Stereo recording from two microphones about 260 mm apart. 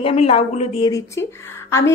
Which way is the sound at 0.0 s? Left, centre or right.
Left.